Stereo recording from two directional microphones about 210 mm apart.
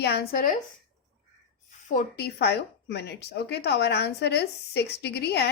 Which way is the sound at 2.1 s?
50° left (ahead or behind).